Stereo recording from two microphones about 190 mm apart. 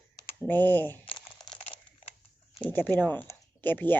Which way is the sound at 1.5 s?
30° left (ahead or behind).